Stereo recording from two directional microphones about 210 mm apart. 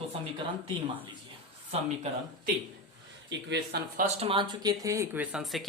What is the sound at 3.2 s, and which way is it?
Speech, 55° right (ahead or behind).